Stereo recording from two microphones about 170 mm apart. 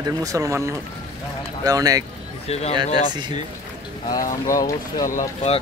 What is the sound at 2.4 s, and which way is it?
Speech, 40° left (ahead or behind).